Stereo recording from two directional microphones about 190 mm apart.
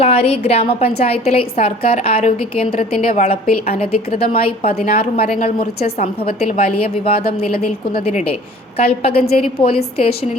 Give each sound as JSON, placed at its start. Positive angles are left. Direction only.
{"t": 0.0, "sound": "a woman's voice", "side_deg": 30}